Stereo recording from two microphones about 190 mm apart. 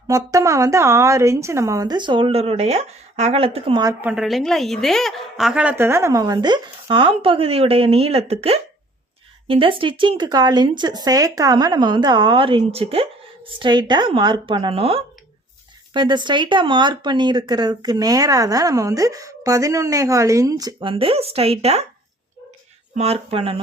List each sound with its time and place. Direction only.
0.1 s a woman's voice: 15° right (ahead or behind)
4.0 s speech: 5° right (ahead or behind); by 21.8 s 35° right (ahead or behind)
23.0 s speech: 30° right (ahead or behind)